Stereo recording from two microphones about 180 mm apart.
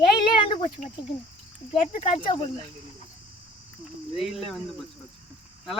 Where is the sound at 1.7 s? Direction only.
30° left (ahead or behind).